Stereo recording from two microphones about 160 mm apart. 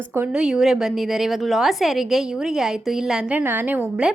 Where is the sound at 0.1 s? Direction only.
10° right (ahead or behind).